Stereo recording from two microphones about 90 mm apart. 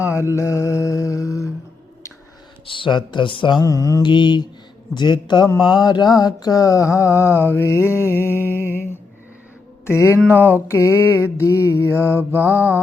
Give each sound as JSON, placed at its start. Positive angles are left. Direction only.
{"t": 0.3, "sound": "mantra", "side_deg": 35}
{"t": 2.6, "sound": "speech", "side_deg": 65}
{"t": 3.6, "sound": "mantra", "side_deg": 40}
{"t": 4.0, "sound": "speech", "side_deg": 60}
{"t": 5.5, "sound": "mantra", "side_deg": 50}
{"t": 9.8, "sound": "speech", "side_deg": 30}
{"t": 10.4, "sound": "mantra", "side_deg": 30}
{"t": 12.3, "sound": "mantra", "side_deg": -20}